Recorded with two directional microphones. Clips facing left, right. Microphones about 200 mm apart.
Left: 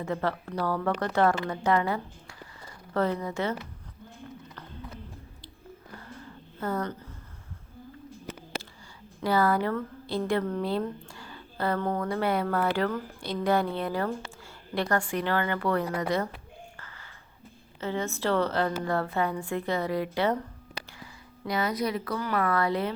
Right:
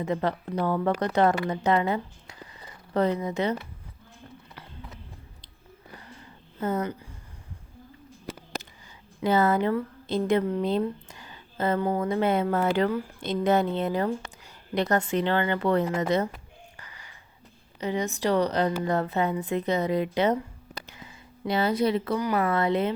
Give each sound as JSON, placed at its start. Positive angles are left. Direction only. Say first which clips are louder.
{"t": 0.0, "sound": "a woman's voice", "louder": "right 3 dB", "side_deg": -20}
{"t": 6.6, "sound": "speech", "louder": "right 3 dB", "side_deg": -20}
{"t": 9.2, "sound": "a woman's voice", "louder": "right 2 dB", "side_deg": -20}
{"t": 11.1, "sound": "a sound", "louder": "left 3 dB", "side_deg": -20}
{"t": 11.9, "sound": "a woman's voice", "louder": "right 3 dB", "side_deg": -20}
{"t": 16.7, "sound": "a sound", "louder": "even", "side_deg": -15}
{"t": 17.7, "sound": "a woman's voice", "louder": "right 3 dB", "side_deg": -15}